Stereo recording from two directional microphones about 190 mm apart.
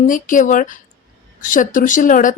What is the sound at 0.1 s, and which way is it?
A woman's voice, 45° left (ahead or behind).